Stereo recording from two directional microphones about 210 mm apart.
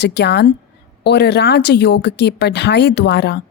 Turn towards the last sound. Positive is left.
turn(degrees=55)  # may be behind; listen again after turning